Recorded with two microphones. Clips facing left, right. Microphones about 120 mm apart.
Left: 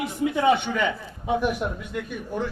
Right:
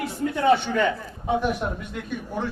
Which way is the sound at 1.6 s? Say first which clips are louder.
Even; 20° right (ahead or behind).